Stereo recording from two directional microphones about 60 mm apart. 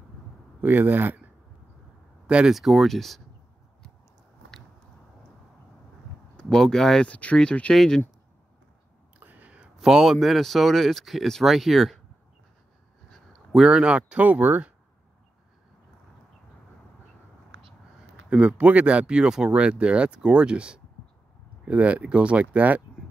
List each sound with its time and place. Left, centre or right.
0.6 s speech: right
2.2 s speech: centre
2.5 s speech: centre
6.3 s speech: centre
7.1 s speech: left
7.7 s speech: centre
9.2 s a sound: right
9.8 s speech: centre
13.1 s speech: centre; by 14.7 s right
18.5 s speech: right